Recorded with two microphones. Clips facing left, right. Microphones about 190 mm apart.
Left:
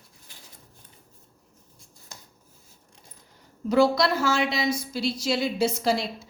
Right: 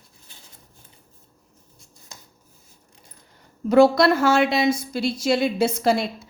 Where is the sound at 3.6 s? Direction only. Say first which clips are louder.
Right 6 dB; 55° right (ahead or behind).